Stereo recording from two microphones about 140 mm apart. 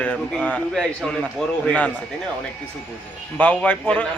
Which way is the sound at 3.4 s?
10° left (ahead or behind).